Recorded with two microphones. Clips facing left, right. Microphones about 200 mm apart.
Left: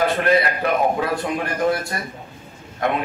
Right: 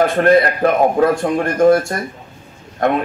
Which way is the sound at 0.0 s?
50° right (ahead or behind).